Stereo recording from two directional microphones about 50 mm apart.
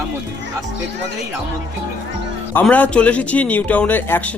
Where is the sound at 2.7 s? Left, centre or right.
Left.